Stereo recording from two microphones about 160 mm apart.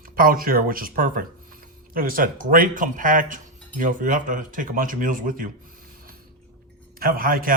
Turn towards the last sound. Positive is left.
turn(degrees=-65)  # may be behind; listen again after turning